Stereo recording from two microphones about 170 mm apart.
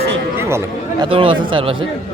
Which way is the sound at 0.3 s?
15° right (ahead or behind).